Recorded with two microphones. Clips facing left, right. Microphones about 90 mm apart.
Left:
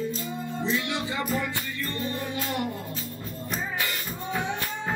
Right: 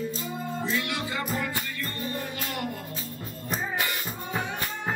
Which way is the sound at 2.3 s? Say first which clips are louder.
Left 3 dB; 25° left (ahead or behind).